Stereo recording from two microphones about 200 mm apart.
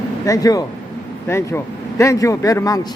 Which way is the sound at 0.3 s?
20° left (ahead or behind).